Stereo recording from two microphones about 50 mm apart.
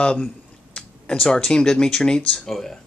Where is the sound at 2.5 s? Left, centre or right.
Centre.